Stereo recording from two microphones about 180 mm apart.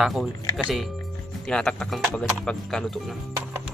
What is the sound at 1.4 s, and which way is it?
Speech, 5° left (ahead or behind).